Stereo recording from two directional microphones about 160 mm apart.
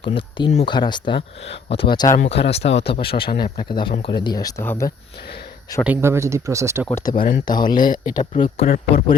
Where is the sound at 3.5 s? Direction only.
30° left (ahead or behind).